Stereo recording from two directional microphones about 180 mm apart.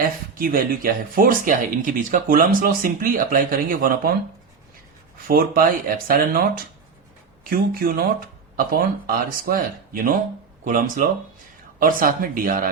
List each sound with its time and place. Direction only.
0.0 s speech: 55° right (ahead or behind)
5.3 s speech: 55° right (ahead or behind)
7.5 s speech: 55° right (ahead or behind)